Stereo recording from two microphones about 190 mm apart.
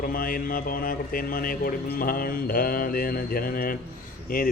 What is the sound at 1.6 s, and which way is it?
Speech, 50° left (ahead or behind).